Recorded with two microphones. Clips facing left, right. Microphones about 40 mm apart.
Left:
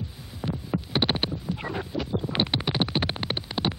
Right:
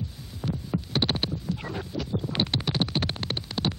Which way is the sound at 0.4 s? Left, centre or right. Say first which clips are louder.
Left 1 dB; centre.